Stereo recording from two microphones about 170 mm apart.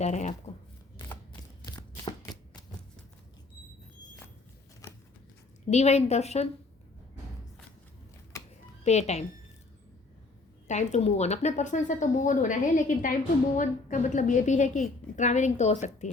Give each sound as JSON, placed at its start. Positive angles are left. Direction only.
{"t": 0.0, "sound": "speech", "side_deg": 45}
{"t": 1.6, "sound": "chopping", "side_deg": 20}
{"t": 5.7, "sound": "a woman's voice", "side_deg": 40}
{"t": 8.8, "sound": "speech", "side_deg": 40}
{"t": 10.7, "sound": "speech", "side_deg": 45}